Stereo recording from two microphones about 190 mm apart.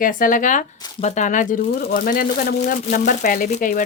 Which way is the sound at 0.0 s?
45° left (ahead or behind).